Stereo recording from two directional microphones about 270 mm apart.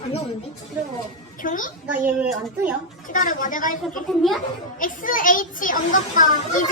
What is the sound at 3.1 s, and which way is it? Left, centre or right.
A child's voice, left.